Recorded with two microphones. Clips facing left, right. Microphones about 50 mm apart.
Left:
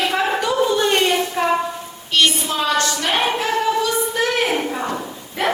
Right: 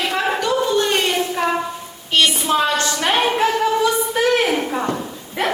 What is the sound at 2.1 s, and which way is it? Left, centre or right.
Speech, right.